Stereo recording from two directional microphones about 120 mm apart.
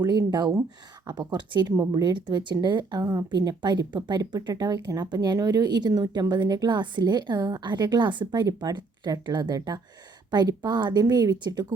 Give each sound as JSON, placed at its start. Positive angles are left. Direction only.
{"t": 0.0, "sound": "speech", "side_deg": -35}